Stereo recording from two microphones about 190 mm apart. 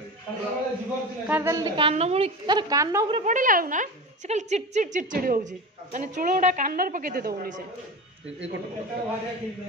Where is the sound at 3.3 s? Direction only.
45° right (ahead or behind).